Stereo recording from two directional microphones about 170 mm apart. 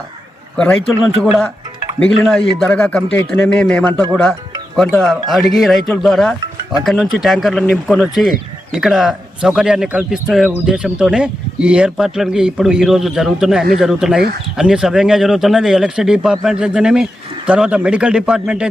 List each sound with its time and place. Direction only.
0.5 s a man's voice: 5° left (ahead or behind)
2.2 s a man's voice: 5° left (ahead or behind)